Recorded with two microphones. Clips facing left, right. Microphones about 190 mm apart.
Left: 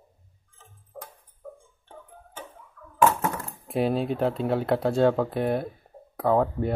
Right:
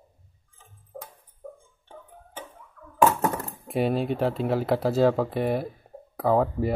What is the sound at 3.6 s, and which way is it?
Speech, centre (ahead or behind).